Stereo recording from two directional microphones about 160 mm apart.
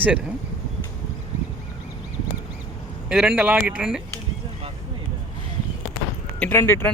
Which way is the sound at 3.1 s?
5° right (ahead or behind).